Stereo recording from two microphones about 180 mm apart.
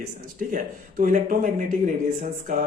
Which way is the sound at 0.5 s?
45° right (ahead or behind).